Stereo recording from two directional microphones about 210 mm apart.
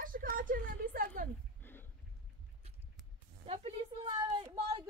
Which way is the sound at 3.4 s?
30° right (ahead or behind).